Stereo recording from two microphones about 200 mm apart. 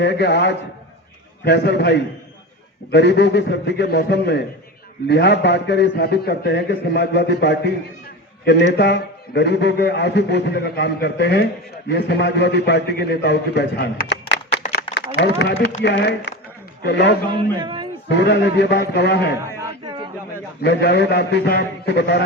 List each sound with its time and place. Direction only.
0.0 s a man's voice: 60° left (ahead or behind)
17.3 s a man's voice: 25° right (ahead or behind)
18.1 s a man's voice: 60° left (ahead or behind)
19.8 s a sound: 20° right (ahead or behind)
20.6 s a man's voice: 55° left (ahead or behind)